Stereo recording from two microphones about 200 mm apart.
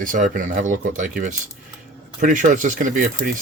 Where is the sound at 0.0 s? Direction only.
40° right (ahead or behind).